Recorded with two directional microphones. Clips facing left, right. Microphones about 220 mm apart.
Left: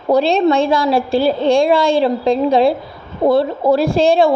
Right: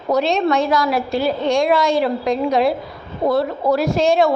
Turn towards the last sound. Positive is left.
turn(degrees=30)  # may be behind; listen again after turning